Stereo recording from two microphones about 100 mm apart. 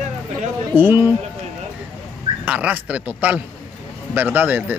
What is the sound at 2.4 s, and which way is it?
Speech, 15° right (ahead or behind).